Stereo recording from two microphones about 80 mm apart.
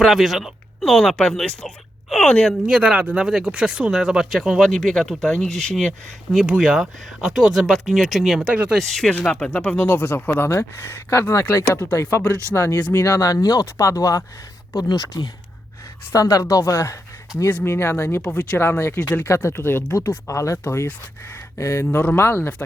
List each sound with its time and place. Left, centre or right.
0.0 s speech: centre
2.5 s speech: centre
4.7 s speech: centre
6.6 s speech: centre
9.2 s speech: centre; by 12.2 s left
12.5 s speech: centre
12.9 s speech: left
13.7 s speech: left
17.4 s speech: left
18.2 s speech: centre
18.5 s speech: left
20.7 s speech: left